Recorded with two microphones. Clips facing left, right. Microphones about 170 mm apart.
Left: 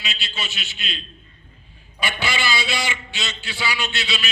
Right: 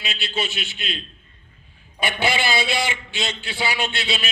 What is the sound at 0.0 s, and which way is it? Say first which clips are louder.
A man's voice: right 5 dB; 55° right (ahead or behind).